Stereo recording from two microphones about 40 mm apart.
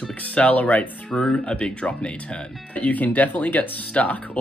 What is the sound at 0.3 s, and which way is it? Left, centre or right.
Speech, left.